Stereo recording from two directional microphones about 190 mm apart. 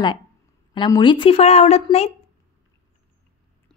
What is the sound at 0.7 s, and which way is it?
A woman's voice, 25° left (ahead or behind).